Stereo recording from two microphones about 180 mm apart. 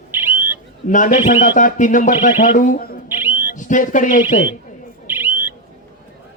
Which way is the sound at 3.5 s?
45° left (ahead or behind).